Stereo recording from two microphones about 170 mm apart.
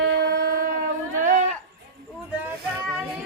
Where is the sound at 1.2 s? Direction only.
45° right (ahead or behind).